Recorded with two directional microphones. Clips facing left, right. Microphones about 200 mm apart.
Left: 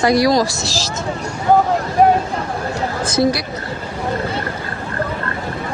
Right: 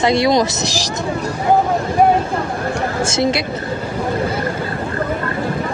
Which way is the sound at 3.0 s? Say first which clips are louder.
Left 3 dB; 25° right (ahead or behind).